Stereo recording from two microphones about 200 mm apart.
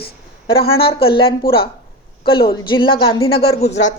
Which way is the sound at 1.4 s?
50° left (ahead or behind).